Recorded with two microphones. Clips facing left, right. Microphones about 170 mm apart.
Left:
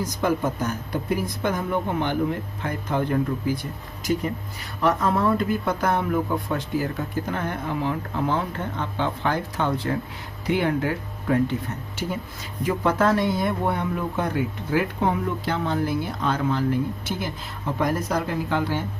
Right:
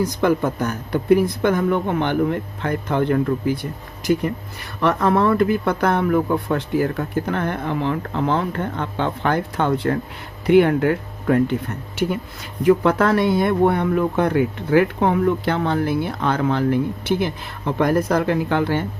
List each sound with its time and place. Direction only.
0.0 s speech: 65° right (ahead or behind)
12.6 s speech: 65° right (ahead or behind)